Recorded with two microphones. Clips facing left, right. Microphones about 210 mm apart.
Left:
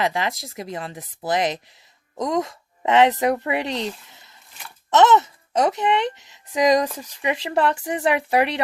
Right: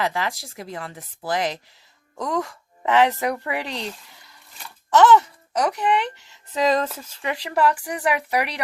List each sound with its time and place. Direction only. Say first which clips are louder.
0.0 s speech: left 2 dB; 20° left (ahead or behind)